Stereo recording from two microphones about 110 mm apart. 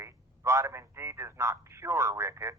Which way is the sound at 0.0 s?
25° right (ahead or behind).